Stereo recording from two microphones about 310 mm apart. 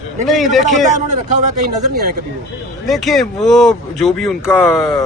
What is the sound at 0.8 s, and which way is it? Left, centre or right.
Speech, right.